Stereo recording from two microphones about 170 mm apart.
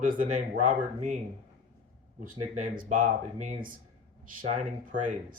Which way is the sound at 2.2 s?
50° right (ahead or behind).